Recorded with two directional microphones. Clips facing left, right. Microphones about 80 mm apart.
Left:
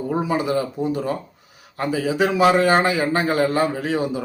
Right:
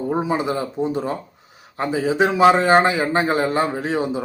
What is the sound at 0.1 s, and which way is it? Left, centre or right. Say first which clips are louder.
Speech: left 1 dB; right.